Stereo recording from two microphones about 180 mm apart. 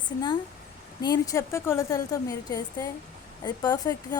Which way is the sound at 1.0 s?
20° left (ahead or behind).